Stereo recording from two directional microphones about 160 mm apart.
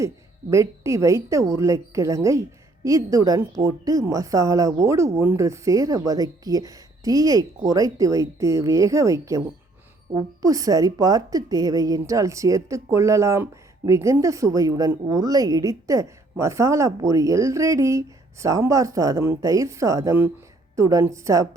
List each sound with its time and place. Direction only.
0.5 s a woman's voice: 20° right (ahead or behind)